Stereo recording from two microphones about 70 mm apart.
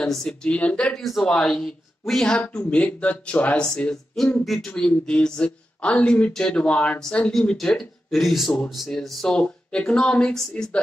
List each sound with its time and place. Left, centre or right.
0.0 s speech: centre
0.8 s speech: centre
3.6 s speech: centre
9.3 s speech: centre